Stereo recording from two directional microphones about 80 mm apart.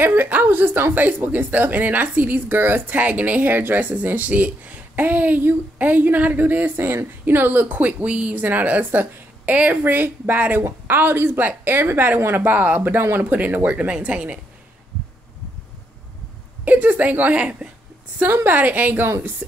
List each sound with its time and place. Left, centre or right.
0.0 s a woman's voice: right
16.6 s a woman's voice: centre